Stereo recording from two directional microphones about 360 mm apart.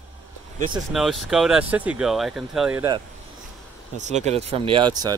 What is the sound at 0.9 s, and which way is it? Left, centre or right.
Speech, centre.